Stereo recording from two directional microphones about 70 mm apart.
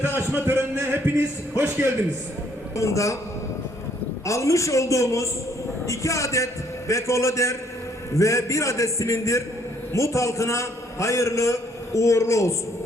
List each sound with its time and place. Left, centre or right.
0.3 s a sound: right
1.5 s a man's voice: right
2.7 s a man's voice: left
4.3 s a man's voice: left